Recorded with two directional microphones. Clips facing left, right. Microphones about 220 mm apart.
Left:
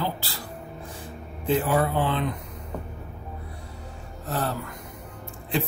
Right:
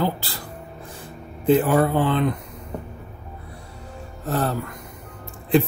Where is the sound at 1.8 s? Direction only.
50° right (ahead or behind).